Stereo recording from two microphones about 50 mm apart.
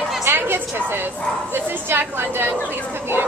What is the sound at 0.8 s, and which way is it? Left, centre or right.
A woman's voice, right.